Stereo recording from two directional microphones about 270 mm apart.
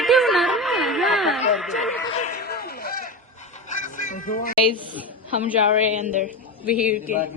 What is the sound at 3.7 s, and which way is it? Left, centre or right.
Music, left.